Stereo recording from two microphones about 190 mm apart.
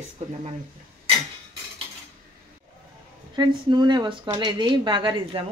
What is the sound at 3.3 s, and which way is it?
A woman's voice, 25° right (ahead or behind).